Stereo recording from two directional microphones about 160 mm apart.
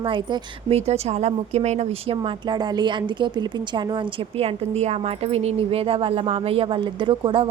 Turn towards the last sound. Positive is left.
turn(degrees=-30)  # may be behind; listen again after turning